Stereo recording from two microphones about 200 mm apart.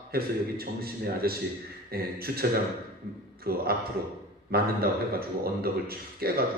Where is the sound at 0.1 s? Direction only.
50° right (ahead or behind).